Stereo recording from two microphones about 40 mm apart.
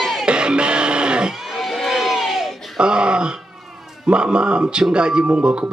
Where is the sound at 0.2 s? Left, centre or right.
Right.